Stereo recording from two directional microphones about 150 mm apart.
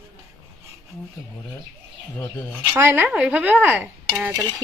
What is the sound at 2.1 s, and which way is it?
Speech, 15° left (ahead or behind).